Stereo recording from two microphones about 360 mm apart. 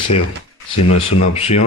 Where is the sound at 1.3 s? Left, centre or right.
Centre.